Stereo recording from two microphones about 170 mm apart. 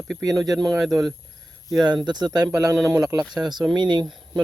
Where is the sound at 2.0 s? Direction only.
25° right (ahead or behind).